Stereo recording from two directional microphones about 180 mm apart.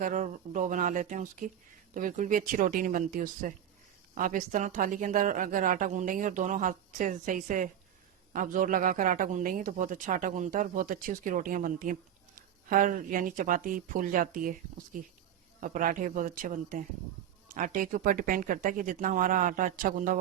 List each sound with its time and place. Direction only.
0.0 s a man's voice: 45° right (ahead or behind)